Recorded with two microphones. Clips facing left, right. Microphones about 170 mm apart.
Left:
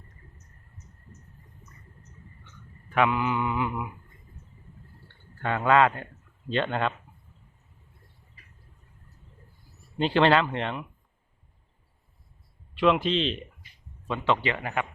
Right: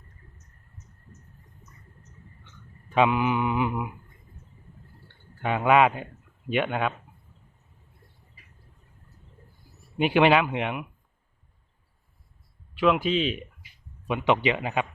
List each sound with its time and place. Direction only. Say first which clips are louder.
2.9 s mantra: right 2 dB; 20° right (ahead or behind)
5.4 s speech: right 1 dB; 15° right (ahead or behind)
10.0 s speech: right 1 dB; 10° right (ahead or behind)
12.7 s speech: even; 5° right (ahead or behind)
14.1 s speech: right 3 dB; 15° right (ahead or behind)